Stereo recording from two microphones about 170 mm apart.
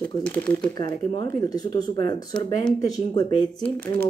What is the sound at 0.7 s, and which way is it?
Speech, 25° left (ahead or behind).